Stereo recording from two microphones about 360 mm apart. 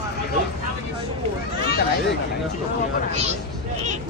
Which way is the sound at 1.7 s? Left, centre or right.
Left.